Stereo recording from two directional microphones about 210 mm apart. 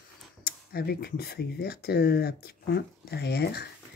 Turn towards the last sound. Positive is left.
turn(degrees=50)  # may be behind; listen again after turning